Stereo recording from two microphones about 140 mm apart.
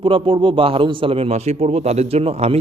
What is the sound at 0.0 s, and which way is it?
A man's voice, 40° right (ahead or behind).